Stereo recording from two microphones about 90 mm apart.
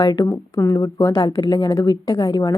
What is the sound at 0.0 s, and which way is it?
Speech, 45° left (ahead or behind).